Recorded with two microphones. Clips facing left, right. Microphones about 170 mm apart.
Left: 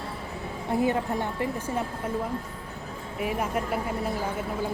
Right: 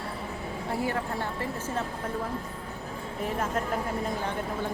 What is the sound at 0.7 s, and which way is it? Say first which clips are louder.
A woman's voice: left 6 dB; 20° left (ahead or behind).